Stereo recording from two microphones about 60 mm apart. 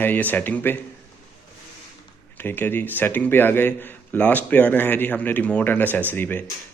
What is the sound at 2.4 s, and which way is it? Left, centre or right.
A man's voice, left.